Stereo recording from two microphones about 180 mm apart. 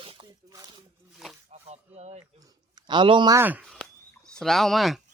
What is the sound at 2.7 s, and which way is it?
Speech, 25° right (ahead or behind).